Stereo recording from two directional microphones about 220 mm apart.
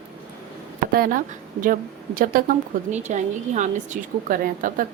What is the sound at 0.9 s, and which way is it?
A woman's voice, 45° right (ahead or behind).